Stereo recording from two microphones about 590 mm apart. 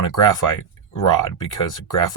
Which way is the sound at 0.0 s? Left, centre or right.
Left.